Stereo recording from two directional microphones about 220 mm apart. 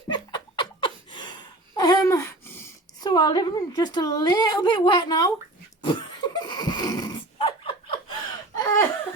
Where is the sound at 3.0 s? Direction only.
20° left (ahead or behind).